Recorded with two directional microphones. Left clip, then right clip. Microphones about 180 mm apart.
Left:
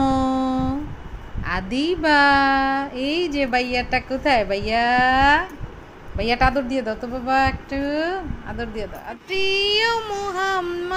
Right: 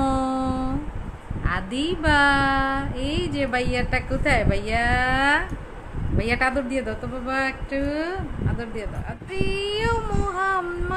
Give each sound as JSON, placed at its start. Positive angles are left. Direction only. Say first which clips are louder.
{"t": 0.3, "sound": "a sound", "louder": "left 3 dB", "side_deg": 20}
{"t": 1.4, "sound": "speech", "louder": "left 3 dB", "side_deg": 20}
{"t": 9.3, "sound": "child singing", "louder": "left 7 dB", "side_deg": 5}